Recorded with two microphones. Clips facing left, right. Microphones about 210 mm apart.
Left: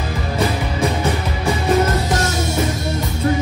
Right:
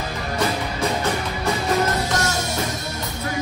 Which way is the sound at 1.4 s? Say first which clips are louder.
Left 5 dB; 30° left (ahead or behind).